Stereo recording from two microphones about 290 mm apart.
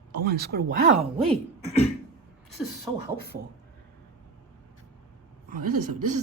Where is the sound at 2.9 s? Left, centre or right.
Centre.